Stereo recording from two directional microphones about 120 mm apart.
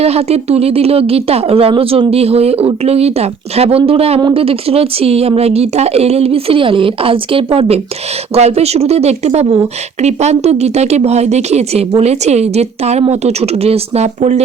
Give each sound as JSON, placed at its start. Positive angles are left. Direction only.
{"t": 0.0, "sound": "a woman's voice", "side_deg": -60}
{"t": 8.4, "sound": "a woman's voice", "side_deg": -60}